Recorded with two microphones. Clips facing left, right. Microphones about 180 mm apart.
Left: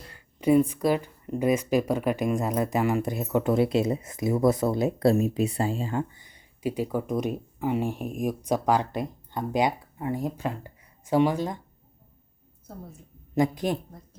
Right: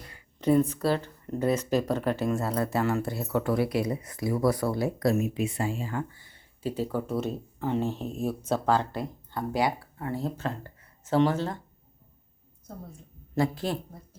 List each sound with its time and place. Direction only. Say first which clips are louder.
0.3 s speech: left 2 dB; 10° left (ahead or behind)
12.7 s a woman's voice: even; 5° left (ahead or behind)
13.3 s speech: left 3 dB; 15° left (ahead or behind)